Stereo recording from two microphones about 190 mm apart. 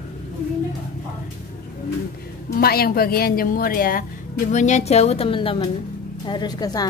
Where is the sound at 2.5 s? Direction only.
50° left (ahead or behind).